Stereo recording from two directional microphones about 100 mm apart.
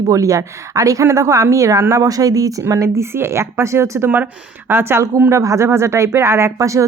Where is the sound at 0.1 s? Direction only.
35° right (ahead or behind).